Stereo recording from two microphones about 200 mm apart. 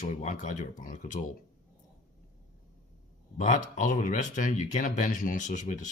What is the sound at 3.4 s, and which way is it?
Speech, 40° left (ahead or behind).